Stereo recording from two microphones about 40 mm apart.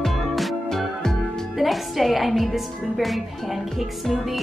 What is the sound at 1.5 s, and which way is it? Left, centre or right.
A woman's voice, centre.